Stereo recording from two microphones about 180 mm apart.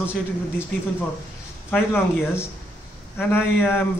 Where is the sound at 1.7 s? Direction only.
10° left (ahead or behind).